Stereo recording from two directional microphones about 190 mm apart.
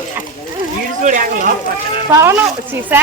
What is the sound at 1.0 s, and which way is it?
Speech, 45° right (ahead or behind).